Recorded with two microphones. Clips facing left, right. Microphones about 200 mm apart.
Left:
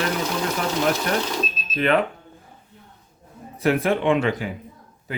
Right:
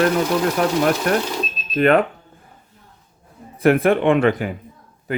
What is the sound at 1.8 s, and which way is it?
Speech, 45° right (ahead or behind).